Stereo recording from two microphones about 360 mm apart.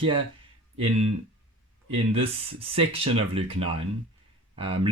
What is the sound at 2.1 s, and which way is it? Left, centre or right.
Speech, centre.